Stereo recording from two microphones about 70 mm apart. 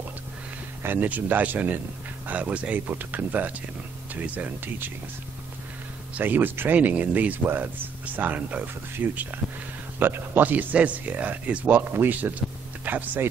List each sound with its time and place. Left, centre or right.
0.8 s speech: right
6.1 s speech: right